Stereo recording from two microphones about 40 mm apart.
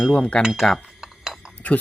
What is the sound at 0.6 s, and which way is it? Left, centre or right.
Speech, centre.